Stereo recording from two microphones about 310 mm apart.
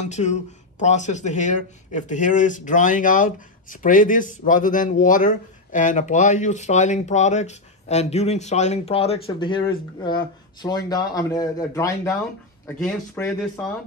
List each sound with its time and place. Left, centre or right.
0.0 s speech: left; by 13.7 s centre